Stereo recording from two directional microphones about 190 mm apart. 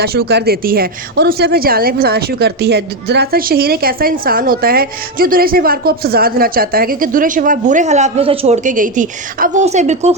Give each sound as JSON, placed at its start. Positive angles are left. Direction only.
{"t": 0.0, "sound": "speech", "side_deg": -55}